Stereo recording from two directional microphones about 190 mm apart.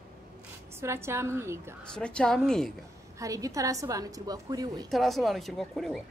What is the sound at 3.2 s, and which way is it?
A woman's voice, 15° right (ahead or behind).